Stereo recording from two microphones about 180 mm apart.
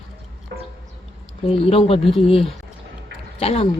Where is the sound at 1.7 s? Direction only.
35° left (ahead or behind).